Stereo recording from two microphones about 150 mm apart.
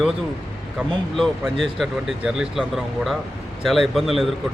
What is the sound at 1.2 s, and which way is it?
Speech, centre (ahead or behind).